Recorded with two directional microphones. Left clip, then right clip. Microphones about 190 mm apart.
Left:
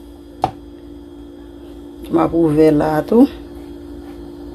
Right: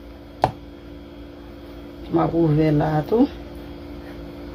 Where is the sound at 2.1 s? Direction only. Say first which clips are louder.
Left 6 dB; 45° left (ahead or behind).